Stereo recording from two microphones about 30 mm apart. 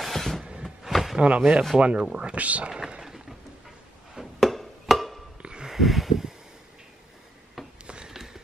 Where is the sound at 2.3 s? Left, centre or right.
Right.